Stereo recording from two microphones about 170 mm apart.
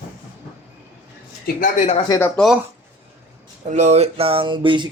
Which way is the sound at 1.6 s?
45° left (ahead or behind).